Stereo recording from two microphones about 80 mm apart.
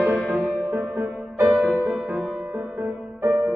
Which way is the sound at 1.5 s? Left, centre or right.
Centre.